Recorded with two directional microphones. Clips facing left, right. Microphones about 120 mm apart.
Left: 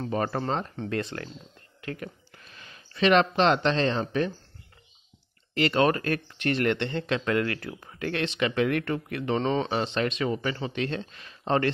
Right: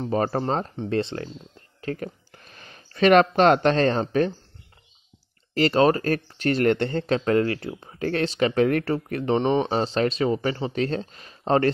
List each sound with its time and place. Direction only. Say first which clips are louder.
0.1 s speech: right 5 dB; 35° right (ahead or behind)
2.3 s speech: right 2 dB; 45° right (ahead or behind)
5.5 s speech: right 4 dB; 35° right (ahead or behind)
9.4 s speech: right 4 dB; 20° right (ahead or behind)
9.7 s speech: right 4 dB; 35° right (ahead or behind)